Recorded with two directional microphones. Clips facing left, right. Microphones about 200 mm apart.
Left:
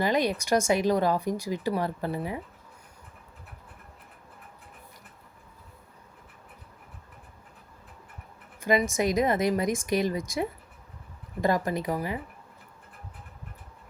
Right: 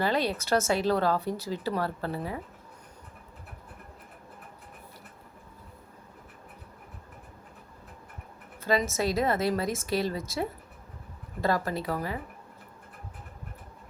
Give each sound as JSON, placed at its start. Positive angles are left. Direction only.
{"t": 0.0, "sound": "speech", "side_deg": 15}
{"t": 8.6, "sound": "speech", "side_deg": 15}